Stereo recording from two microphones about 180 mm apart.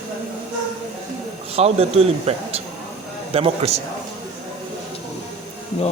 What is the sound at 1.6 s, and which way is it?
A man's voice, 35° right (ahead or behind).